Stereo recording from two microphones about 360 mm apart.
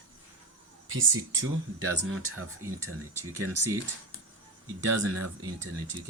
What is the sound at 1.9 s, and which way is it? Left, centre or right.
Speech, right.